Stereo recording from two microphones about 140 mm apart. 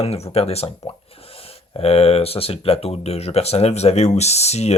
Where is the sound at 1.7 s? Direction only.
45° left (ahead or behind).